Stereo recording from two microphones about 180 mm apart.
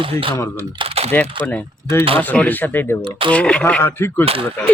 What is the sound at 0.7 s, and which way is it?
Typing, 35° right (ahead or behind).